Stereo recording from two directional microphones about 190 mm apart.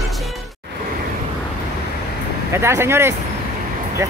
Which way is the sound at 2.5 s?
15° right (ahead or behind).